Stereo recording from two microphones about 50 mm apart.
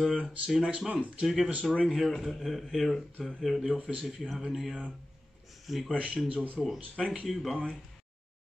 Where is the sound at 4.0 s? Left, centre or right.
Centre.